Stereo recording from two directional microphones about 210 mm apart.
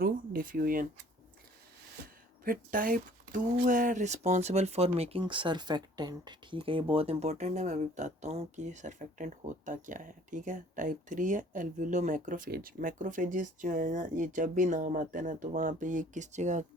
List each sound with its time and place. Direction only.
0.0 s speech: 40° right (ahead or behind)
2.4 s speech: 40° right (ahead or behind)